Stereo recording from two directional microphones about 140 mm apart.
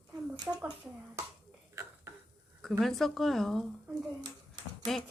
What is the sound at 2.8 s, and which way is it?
Speech, 5° left (ahead or behind).